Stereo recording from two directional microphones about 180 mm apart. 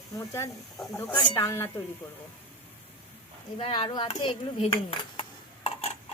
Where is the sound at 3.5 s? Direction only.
30° left (ahead or behind).